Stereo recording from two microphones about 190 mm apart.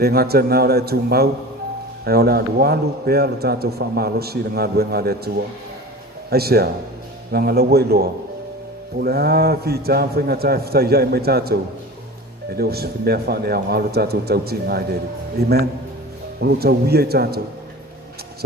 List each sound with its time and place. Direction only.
0.0 s a man's voice: 55° right (ahead or behind)
6.3 s a man's voice: 55° right (ahead or behind)